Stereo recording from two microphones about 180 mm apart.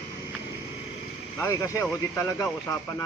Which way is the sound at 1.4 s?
20° left (ahead or behind).